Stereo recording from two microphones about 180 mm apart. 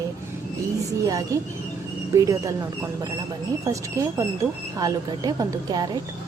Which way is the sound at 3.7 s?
15° right (ahead or behind).